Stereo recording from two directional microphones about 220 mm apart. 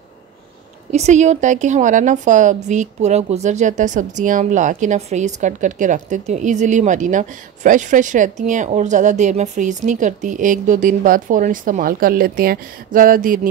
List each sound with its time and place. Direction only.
0.9 s a woman's voice: 30° right (ahead or behind)